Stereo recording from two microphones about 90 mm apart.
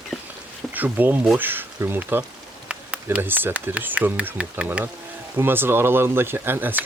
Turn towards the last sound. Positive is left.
turn(degrees=-20)  # may be behind; listen again after turning